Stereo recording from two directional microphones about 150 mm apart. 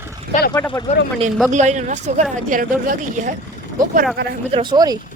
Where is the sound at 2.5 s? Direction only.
60° right (ahead or behind).